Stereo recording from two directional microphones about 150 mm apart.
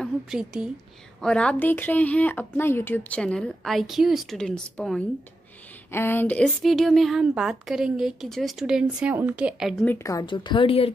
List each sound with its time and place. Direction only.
0.0 s a woman's voice: 5° right (ahead or behind)
1.2 s speech: 5° left (ahead or behind)
5.9 s a woman's voice: 15° left (ahead or behind); by 9.8 s centre (ahead or behind)
9.8 s speech: 20° left (ahead or behind)
10.2 s a woman's voice: 30° left (ahead or behind)